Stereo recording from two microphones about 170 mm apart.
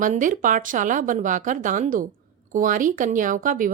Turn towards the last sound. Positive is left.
turn(degrees=-50)  # may be behind; listen again after turning